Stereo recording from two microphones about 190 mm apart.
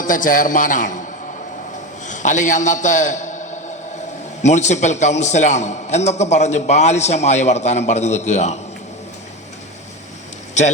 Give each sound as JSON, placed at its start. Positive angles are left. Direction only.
{"t": 0.0, "sound": "a man's voice", "side_deg": 45}
{"t": 2.0, "sound": "a man's voice", "side_deg": 40}